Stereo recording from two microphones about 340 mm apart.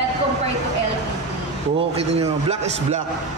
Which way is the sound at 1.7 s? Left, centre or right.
Centre.